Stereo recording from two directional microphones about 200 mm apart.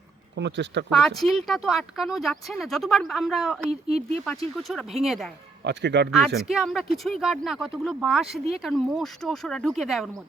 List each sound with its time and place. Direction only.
0.3 s speech: 60° right (ahead or behind)
0.9 s speech: centre (ahead or behind)
3.7 s speech: 30° right (ahead or behind)
4.7 s speech: centre (ahead or behind)
5.6 s speech: 60° right (ahead or behind)
6.1 s speech: centre (ahead or behind)